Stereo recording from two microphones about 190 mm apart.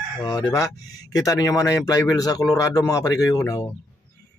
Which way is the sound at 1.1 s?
20° left (ahead or behind).